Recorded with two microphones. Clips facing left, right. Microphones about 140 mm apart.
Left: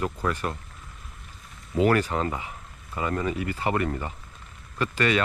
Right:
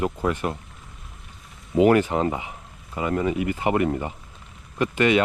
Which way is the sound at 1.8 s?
15° right (ahead or behind).